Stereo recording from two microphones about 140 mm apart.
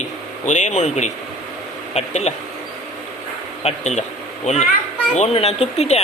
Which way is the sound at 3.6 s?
55° left (ahead or behind).